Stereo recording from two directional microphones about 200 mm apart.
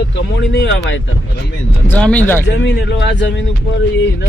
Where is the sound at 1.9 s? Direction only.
5° left (ahead or behind).